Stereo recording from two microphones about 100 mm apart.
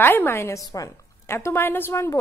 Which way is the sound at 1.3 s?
25° left (ahead or behind).